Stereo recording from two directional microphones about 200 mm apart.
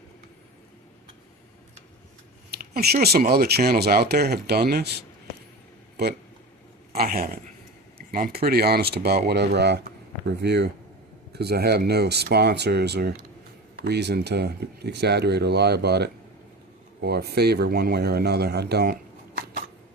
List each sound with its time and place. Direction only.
2.5 s speech: 50° right (ahead or behind)
6.0 s speech: 55° right (ahead or behind)